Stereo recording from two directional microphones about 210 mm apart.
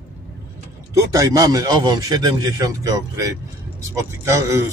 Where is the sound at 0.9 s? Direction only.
15° right (ahead or behind).